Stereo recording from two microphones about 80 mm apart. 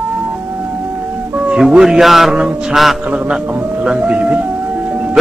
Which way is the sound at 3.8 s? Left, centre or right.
Centre.